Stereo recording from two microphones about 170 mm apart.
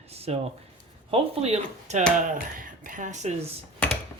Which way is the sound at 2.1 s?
50° right (ahead or behind).